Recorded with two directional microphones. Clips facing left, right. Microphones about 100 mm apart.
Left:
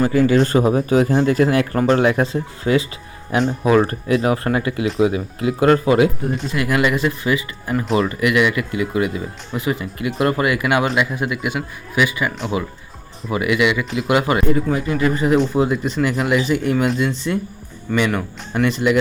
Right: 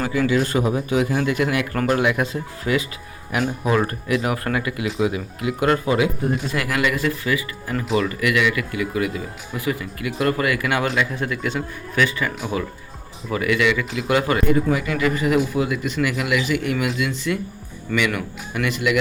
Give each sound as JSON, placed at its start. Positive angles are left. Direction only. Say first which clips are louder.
{"t": 0.0, "sound": "a man's voice", "louder": "left 5 dB", "side_deg": 45}
{"t": 13.3, "sound": "speech", "louder": "left 2 dB", "side_deg": 20}
{"t": 14.3, "sound": "speech", "louder": "left 1 dB", "side_deg": 35}